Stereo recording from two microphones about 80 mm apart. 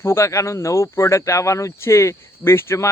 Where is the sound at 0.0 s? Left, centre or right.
Left.